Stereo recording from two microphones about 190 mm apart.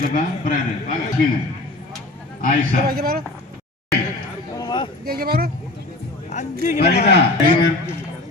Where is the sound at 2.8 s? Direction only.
50° right (ahead or behind).